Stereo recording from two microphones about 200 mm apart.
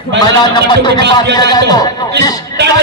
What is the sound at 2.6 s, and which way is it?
Music, 55° right (ahead or behind).